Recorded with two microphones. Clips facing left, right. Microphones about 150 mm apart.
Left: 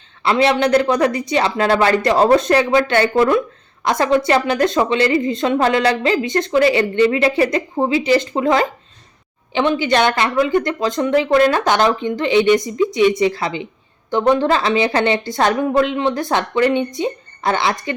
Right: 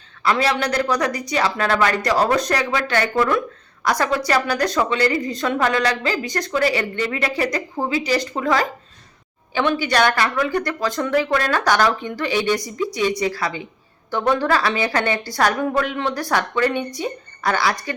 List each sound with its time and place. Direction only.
0.2 s a woman's voice: 25° left (ahead or behind)